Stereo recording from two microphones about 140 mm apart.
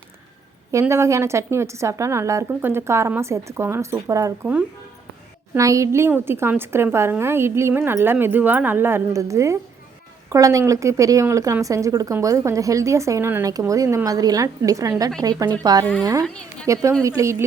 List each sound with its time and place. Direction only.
0.7 s speech: 20° right (ahead or behind)
5.5 s a woman's voice: 20° right (ahead or behind)